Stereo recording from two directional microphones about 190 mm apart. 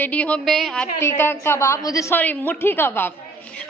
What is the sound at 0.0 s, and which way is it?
A woman's voice, 5° left (ahead or behind).